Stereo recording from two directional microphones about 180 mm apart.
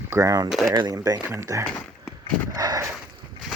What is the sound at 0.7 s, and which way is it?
Speech, 20° right (ahead or behind).